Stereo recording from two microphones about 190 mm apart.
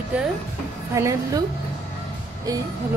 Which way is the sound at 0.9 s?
15° right (ahead or behind).